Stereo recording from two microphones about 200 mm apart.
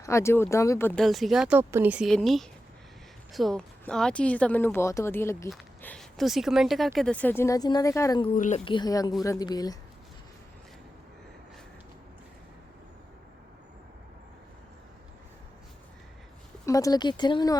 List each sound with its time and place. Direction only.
0.0 s speech: 15° left (ahead or behind)
1.0 s speech: centre (ahead or behind); by 8.3 s 20° left (ahead or behind)
8.4 s speech: 35° left (ahead or behind); by 9.7 s 20° left (ahead or behind)
16.6 s speech: 15° left (ahead or behind)